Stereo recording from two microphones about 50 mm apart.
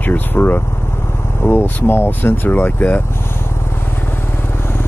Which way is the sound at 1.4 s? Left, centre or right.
Left.